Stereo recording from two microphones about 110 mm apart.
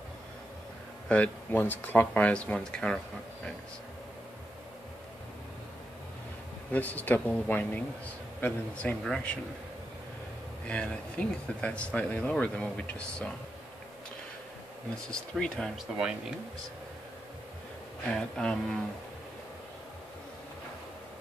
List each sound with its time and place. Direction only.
1.0 s speech: 15° left (ahead or behind)
6.7 s speech: 15° left (ahead or behind)
10.7 s speech: 10° left (ahead or behind)
15.0 s speech: 5° left (ahead or behind)
16.0 s speech: 5° right (ahead or behind)
18.1 s speech: 5° left (ahead or behind)